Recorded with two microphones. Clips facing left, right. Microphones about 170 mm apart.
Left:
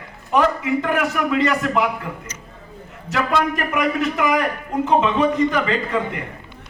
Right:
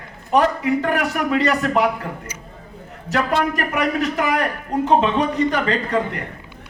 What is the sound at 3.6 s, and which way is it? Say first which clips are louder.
A man's voice: even; 35° right (ahead or behind).